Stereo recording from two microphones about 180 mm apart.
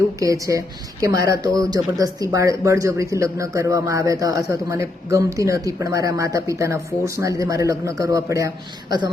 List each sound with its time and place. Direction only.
0.2 s speech: 20° right (ahead or behind)